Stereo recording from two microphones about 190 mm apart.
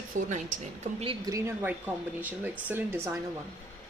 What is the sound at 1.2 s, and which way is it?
Speech, 15° right (ahead or behind).